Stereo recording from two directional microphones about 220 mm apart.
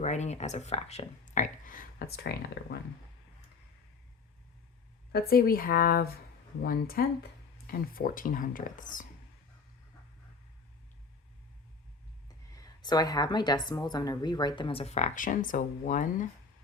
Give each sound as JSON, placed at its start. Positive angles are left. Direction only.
{"t": 0.0, "sound": "speech", "side_deg": 30}
{"t": 5.1, "sound": "speech", "side_deg": 45}
{"t": 12.5, "sound": "a woman's voice", "side_deg": 15}